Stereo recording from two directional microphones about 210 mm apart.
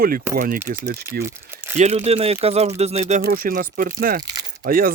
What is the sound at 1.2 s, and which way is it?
Crumpling, 10° right (ahead or behind).